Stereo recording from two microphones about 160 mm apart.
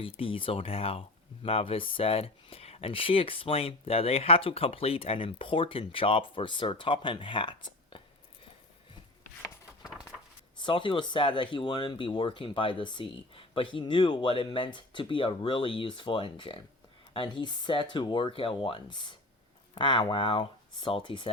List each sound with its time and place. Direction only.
0.0 s speech: 35° left (ahead or behind)
10.6 s speech: 30° left (ahead or behind)